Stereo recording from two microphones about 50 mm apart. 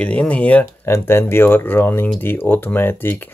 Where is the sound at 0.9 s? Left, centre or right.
Left.